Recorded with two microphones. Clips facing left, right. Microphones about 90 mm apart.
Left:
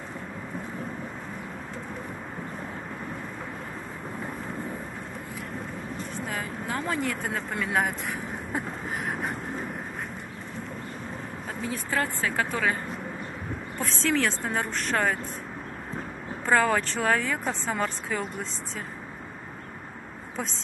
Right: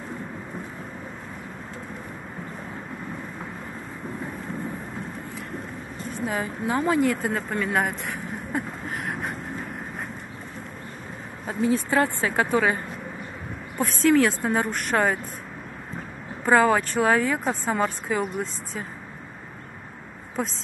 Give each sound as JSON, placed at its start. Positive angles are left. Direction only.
{"t": 6.3, "sound": "a woman's voice", "side_deg": -25}
{"t": 6.8, "sound": "speech", "side_deg": 0}
{"t": 11.4, "sound": "a woman's voice", "side_deg": -20}
{"t": 13.7, "sound": "a woman's voice", "side_deg": -10}
{"t": 16.4, "sound": "a woman's voice", "side_deg": -10}
{"t": 20.4, "sound": "speech", "side_deg": 0}